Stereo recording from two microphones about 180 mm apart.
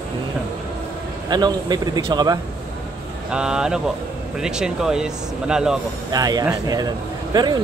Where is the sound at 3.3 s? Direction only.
5° right (ahead or behind).